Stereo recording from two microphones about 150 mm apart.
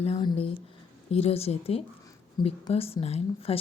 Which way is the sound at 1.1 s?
40° left (ahead or behind).